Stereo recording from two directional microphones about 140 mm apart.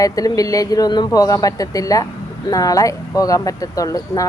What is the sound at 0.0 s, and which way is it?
Speech, 25° left (ahead or behind).